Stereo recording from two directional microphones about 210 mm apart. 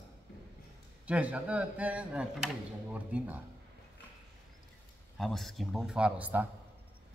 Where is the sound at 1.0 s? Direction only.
5° right (ahead or behind).